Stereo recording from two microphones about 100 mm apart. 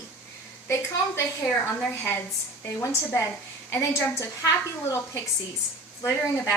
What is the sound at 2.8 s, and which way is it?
A woman's voice, 35° left (ahead or behind).